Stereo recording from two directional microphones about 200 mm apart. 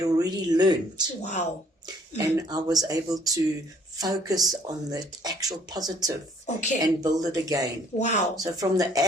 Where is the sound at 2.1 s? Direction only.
20° right (ahead or behind).